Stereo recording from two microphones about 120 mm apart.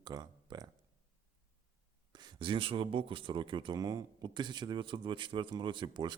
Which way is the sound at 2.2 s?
45° right (ahead or behind).